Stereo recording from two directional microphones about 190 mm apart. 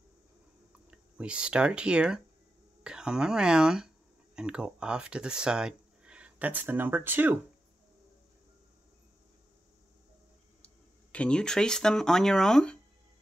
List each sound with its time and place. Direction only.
0.8 s speech: 5° right (ahead or behind)
10.6 s speech: 5° left (ahead or behind)